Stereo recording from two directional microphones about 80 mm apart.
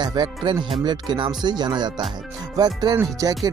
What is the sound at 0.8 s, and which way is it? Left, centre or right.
Music, right.